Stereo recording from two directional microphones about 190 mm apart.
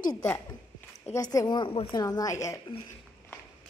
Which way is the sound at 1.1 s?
20° left (ahead or behind).